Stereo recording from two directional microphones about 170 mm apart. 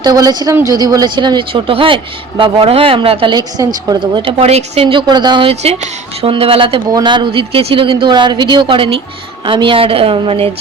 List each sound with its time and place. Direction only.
0.0 s a woman's voice: 20° right (ahead or behind)